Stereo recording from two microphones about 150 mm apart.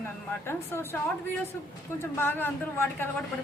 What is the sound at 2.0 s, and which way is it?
A woman's voice, 15° left (ahead or behind).